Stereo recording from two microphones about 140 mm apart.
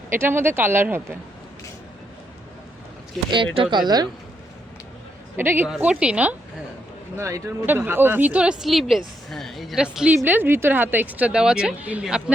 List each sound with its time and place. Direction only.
0.1 s speech: 15° right (ahead or behind)
3.2 s speech: 35° right (ahead or behind)
5.4 s speech: 15° right (ahead or behind)
5.6 s speech: 5° right (ahead or behind)
7.2 s speech: 20° right (ahead or behind)